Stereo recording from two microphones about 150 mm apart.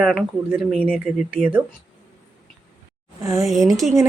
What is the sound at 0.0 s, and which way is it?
Speech, 5° right (ahead or behind).